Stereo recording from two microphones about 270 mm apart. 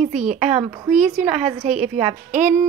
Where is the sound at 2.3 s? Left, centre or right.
Centre.